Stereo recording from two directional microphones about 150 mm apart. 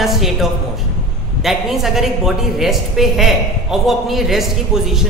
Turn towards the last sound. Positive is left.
turn(degrees=0)  # may be behind; listen again after turning